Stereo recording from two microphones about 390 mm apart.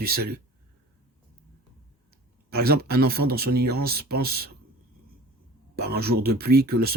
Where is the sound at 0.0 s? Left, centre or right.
Right.